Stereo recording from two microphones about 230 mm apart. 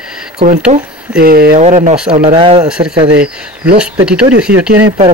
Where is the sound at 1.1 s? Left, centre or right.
Right.